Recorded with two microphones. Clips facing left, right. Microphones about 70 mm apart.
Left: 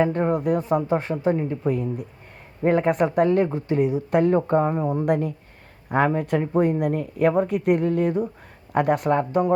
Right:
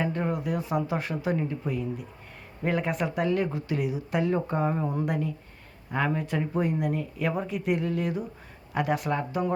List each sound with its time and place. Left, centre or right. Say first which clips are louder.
0.0 s speech: left 8 dB; left
1.6 s speech: left 7 dB; left
4.1 s speech: left 8 dB; left
4.7 s speech: left 5 dB; left
5.0 s speech: left 7 dB; left